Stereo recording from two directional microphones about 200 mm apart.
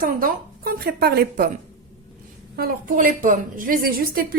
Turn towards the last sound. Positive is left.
turn(degrees=-45)  # may be behind; listen again after turning